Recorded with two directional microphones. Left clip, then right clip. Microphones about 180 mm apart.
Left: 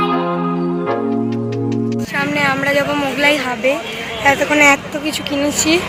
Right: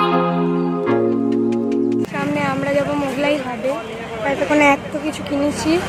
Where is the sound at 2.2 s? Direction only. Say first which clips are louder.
Left 4 dB; 10° right (ahead or behind).